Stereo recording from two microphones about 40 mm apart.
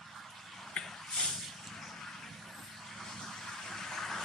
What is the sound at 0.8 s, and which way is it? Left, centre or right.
Snort, left.